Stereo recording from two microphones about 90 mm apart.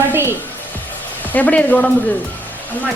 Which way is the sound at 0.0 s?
25° right (ahead or behind).